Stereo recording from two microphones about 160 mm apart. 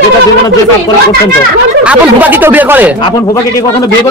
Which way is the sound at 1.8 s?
10° right (ahead or behind).